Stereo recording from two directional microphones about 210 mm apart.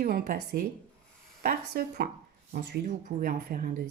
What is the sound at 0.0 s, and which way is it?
A woman's voice, 45° right (ahead or behind).